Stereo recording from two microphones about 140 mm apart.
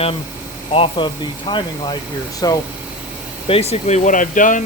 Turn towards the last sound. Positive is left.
turn(degrees=70)  # may be behind; listen again after turning